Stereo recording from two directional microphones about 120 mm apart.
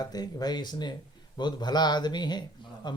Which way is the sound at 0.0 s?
30° left (ahead or behind).